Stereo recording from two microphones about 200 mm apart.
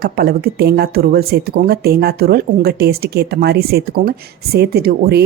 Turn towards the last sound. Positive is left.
turn(degrees=-55)  # may be behind; listen again after turning